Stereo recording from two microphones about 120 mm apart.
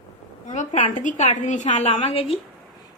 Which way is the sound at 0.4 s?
85° left.